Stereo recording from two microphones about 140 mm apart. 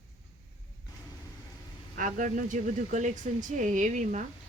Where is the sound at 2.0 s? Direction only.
70° right (ahead or behind).